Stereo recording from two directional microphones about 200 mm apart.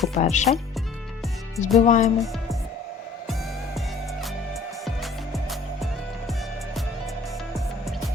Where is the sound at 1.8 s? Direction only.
35° left (ahead or behind).